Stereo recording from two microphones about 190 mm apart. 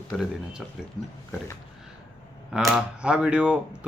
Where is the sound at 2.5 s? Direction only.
5° right (ahead or behind).